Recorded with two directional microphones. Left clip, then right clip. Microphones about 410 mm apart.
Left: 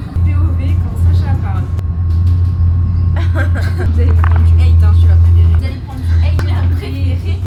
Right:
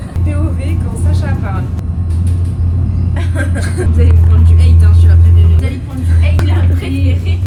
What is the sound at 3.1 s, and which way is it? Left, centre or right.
Vehicle, left.